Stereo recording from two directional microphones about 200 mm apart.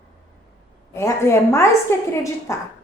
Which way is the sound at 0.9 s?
15° left (ahead or behind).